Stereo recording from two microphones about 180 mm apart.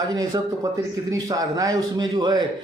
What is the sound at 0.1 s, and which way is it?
A man's voice, 20° right (ahead or behind).